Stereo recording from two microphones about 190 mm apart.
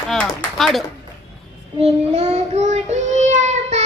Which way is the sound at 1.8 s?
35° right (ahead or behind).